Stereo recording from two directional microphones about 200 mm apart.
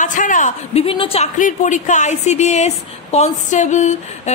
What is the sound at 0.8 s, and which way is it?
A woman's voice, 30° left (ahead or behind).